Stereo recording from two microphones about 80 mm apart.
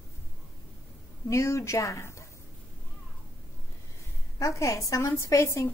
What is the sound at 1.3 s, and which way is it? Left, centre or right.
Speech, left.